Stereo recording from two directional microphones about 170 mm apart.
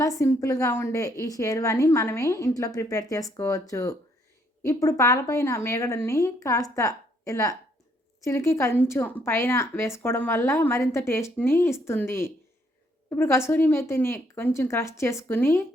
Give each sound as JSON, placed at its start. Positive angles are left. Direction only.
{"t": 0.2, "sound": "a woman's voice", "side_deg": 20}